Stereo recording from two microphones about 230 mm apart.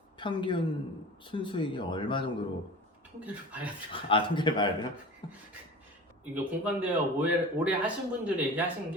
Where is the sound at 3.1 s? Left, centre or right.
Centre.